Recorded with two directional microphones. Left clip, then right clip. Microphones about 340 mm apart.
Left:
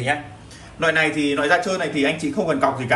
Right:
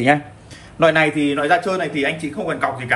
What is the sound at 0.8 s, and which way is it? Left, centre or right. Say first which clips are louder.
A man's voice: right 4 dB; centre.